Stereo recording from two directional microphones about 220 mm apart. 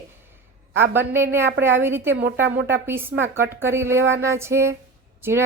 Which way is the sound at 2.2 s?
50° right (ahead or behind).